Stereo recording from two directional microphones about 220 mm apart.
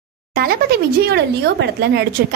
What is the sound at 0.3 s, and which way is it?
A woman's voice, 45° right (ahead or behind).